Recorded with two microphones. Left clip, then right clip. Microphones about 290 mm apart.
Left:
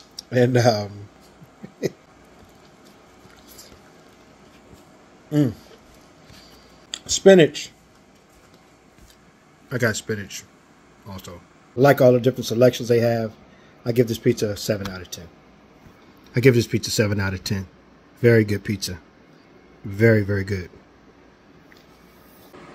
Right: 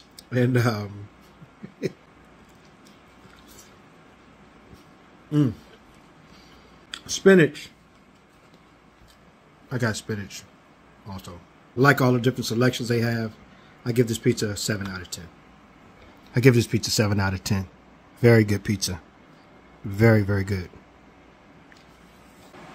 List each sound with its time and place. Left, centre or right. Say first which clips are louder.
0.2 s speech: left 6 dB; centre
6.9 s speech: left 4 dB; centre
9.7 s speech: left 5 dB; centre
16.3 s speech: left 2 dB; centre
19.9 s speech: left 2 dB; centre
20.3 s speech: left 2 dB; right